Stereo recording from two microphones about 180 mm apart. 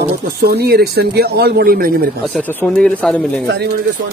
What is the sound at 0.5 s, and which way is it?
A man's voice, 60° right (ahead or behind).